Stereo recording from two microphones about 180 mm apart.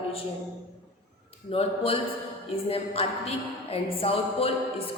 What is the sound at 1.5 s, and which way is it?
A woman's voice, 30° left (ahead or behind).